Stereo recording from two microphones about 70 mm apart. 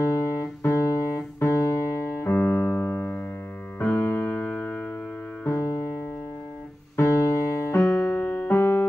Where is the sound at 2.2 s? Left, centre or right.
Left.